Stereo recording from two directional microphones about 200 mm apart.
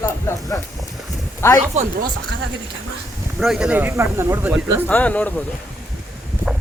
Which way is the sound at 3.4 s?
5° right (ahead or behind).